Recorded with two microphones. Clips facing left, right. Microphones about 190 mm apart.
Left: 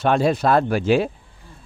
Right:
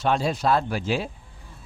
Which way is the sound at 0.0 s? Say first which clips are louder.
Left 5 dB; 55° left (ahead or behind).